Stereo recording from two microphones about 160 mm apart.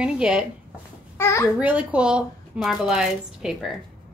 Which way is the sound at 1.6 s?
10° right (ahead or behind).